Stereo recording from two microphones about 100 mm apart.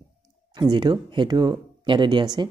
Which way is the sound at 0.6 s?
45° right (ahead or behind).